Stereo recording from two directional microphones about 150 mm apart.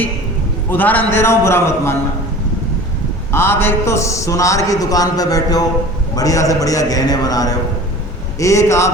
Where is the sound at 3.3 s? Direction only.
15° left (ahead or behind).